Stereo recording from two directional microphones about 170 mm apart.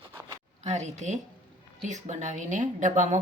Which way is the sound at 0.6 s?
40° right (ahead or behind).